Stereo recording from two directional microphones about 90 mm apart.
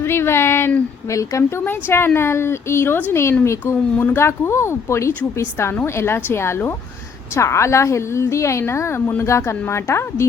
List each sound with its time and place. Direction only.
0.0 s a woman's voice: 25° left (ahead or behind)
3.9 s speech: 20° left (ahead or behind)
4.2 s a woman's voice: 30° left (ahead or behind)